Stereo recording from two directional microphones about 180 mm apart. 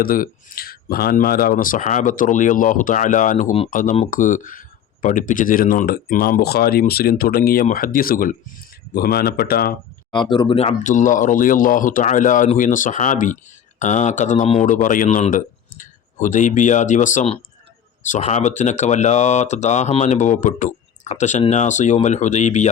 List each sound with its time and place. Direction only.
0.0 s speech: 50° left (ahead or behind)
10.1 s speech: 25° left (ahead or behind)